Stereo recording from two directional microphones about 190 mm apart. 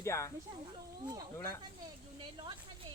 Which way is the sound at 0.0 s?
15° left (ahead or behind).